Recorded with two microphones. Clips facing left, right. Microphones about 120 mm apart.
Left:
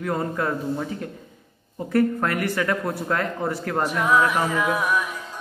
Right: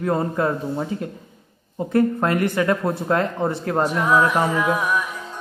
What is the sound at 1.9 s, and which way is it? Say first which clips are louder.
A man's voice: right 2 dB; 25° right (ahead or behind).